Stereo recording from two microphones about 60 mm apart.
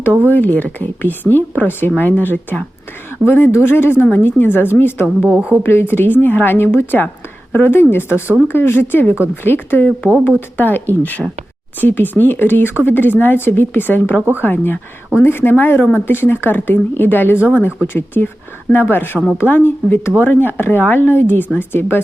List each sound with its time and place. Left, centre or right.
0.3 s a woman's voice: left
5.3 s a woman's voice: centre
5.6 s a woman's voice: left